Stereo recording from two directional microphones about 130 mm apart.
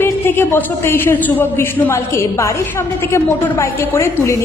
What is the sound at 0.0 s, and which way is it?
A woman's voice, 15° left (ahead or behind).